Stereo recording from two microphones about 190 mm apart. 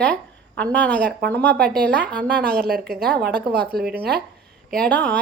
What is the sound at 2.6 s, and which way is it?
Speech, 55° right (ahead or behind).